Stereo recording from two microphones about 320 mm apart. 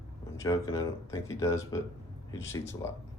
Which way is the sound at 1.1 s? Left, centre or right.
Centre.